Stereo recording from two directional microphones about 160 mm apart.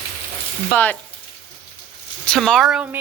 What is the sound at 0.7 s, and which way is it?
Speech, 10° left (ahead or behind).